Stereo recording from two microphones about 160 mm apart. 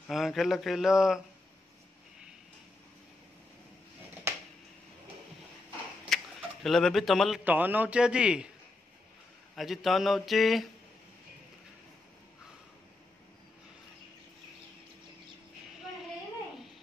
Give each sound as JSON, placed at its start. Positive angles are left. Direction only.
{"t": 0.1, "sound": "speech", "side_deg": 0}
{"t": 4.3, "sound": "a sound", "side_deg": -15}
{"t": 6.0, "sound": "speech", "side_deg": 0}
{"t": 9.6, "sound": "speech", "side_deg": 0}